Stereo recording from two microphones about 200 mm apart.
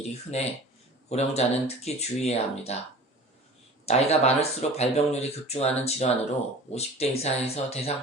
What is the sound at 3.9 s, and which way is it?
Speech, 30° left (ahead or behind).